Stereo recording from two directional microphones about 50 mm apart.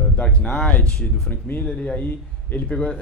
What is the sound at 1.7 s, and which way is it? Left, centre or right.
Speech, left.